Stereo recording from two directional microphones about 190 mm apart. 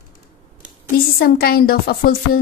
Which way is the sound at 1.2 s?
50° left (ahead or behind).